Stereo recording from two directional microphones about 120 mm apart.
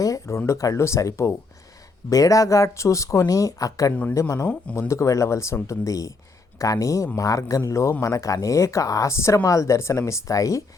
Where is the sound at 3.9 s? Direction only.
15° left (ahead or behind).